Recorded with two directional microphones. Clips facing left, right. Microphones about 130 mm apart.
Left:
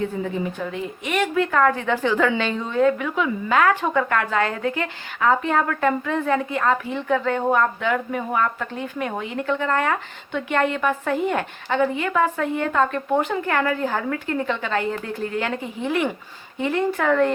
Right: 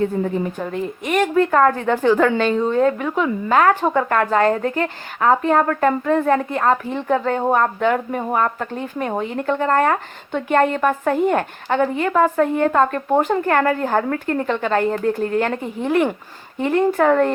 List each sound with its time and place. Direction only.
0.0 s speech: 45° right (ahead or behind)